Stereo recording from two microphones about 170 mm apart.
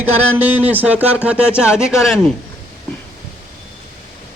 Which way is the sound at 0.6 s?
10° right (ahead or behind).